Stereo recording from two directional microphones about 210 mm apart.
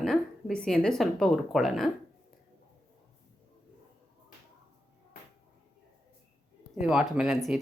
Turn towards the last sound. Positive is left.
turn(degrees=0)  # may be behind; listen again after turning